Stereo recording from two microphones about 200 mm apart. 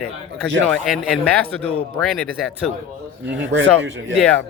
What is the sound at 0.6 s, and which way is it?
Speech, 5° left (ahead or behind).